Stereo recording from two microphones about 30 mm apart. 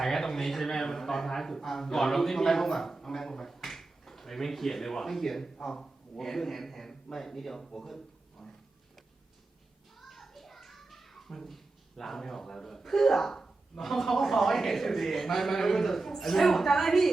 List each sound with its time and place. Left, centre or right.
0.0 s speech: centre
7.7 s a sound: centre
10.0 s children playing: centre
11.4 s a man's voice: centre